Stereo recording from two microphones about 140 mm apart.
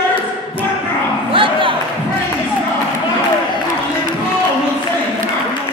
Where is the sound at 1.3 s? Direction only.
40° right (ahead or behind).